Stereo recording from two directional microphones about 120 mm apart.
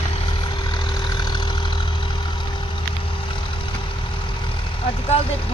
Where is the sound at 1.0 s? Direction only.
35° left (ahead or behind).